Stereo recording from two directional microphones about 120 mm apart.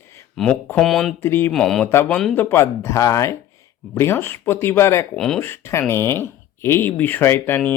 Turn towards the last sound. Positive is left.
turn(degrees=15)  # may be behind; listen again after turning